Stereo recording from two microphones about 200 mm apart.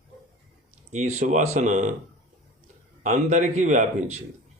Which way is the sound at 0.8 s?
35° right (ahead or behind).